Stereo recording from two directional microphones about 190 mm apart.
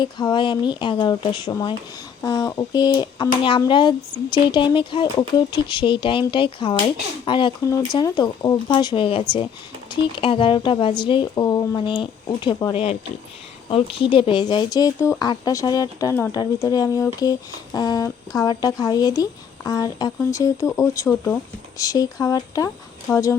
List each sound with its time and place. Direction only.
0.0 s speech: 25° left (ahead or behind)